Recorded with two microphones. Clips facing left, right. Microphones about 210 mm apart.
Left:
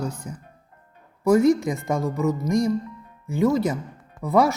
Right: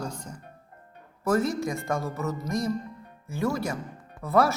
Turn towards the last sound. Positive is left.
turn(degrees=15)  # may be behind; listen again after turning